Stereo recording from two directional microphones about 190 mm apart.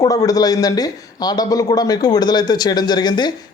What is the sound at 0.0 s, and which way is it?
A man's voice, 20° left (ahead or behind).